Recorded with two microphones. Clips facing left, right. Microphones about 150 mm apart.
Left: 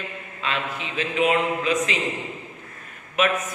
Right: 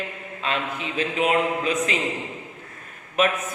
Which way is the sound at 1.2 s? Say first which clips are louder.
Left 1 dB; 40° right (ahead or behind).